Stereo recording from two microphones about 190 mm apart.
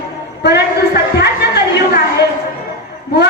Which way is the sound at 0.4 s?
60° left (ahead or behind).